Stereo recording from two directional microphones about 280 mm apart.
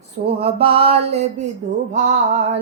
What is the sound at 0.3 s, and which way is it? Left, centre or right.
Music, centre.